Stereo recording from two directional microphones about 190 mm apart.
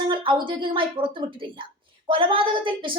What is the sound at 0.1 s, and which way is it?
A woman's voice, 25° right (ahead or behind).